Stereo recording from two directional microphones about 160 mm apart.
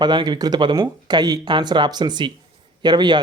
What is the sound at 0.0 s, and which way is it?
Speech, 30° right (ahead or behind).